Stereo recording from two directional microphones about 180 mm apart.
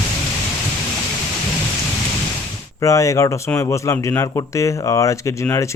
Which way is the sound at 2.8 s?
15° left (ahead or behind).